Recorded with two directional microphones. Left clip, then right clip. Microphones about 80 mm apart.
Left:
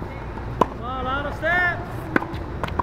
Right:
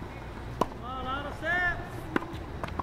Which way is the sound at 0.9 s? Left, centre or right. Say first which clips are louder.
Left 9 dB; left.